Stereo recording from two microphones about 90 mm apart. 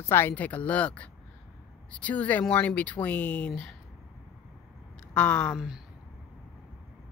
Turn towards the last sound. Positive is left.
turn(degrees=-5)  # may be behind; listen again after turning